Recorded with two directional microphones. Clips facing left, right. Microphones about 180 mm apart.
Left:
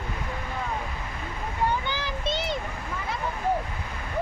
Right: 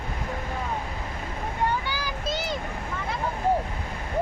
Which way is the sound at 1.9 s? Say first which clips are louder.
Left 1 dB; 25° left (ahead or behind).